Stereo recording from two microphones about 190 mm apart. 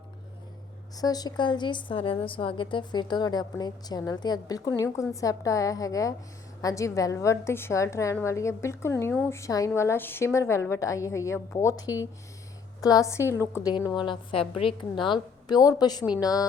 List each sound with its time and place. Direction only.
0.9 s a woman's voice: 20° left (ahead or behind)